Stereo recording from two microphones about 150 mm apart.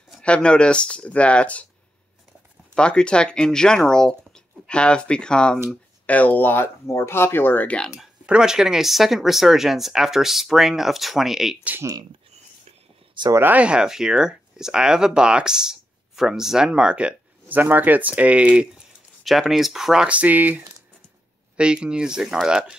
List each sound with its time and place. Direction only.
0.2 s speech: 5° left (ahead or behind)
2.7 s speech: 5° left (ahead or behind)
8.3 s speech: 5° right (ahead or behind)
11.7 s speech: 20° right (ahead or behind)
13.4 s speech: 10° right (ahead or behind)